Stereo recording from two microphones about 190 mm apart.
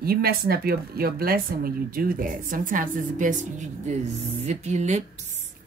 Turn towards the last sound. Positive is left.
turn(degrees=-35)  # may be behind; listen again after turning